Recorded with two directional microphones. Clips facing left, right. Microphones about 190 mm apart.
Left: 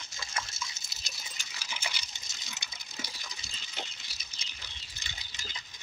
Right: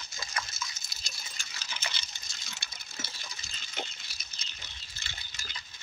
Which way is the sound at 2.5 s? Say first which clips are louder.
Left 1 dB; 15° left (ahead or behind).